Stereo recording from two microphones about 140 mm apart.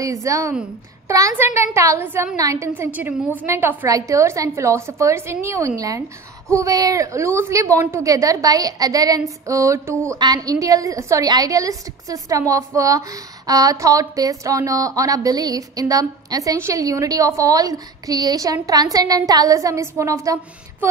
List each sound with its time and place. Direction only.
0.0 s a woman's voice: 20° right (ahead or behind)